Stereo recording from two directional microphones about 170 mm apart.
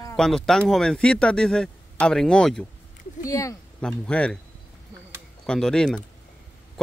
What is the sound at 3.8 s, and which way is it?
Speech, 5° left (ahead or behind).